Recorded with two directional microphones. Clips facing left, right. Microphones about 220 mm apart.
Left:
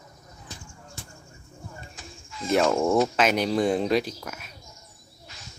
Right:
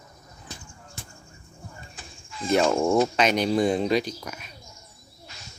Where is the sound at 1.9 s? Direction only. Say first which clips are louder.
Even; 30° right (ahead or behind).